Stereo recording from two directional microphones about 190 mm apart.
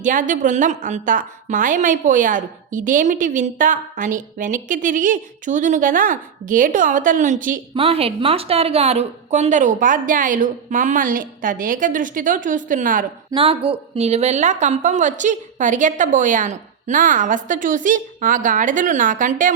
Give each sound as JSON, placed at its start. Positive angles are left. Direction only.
{"t": 0.0, "sound": "a woman's voice", "side_deg": -40}
{"t": 7.8, "sound": "a woman's voice", "side_deg": -30}
{"t": 13.3, "sound": "a woman's voice", "side_deg": -30}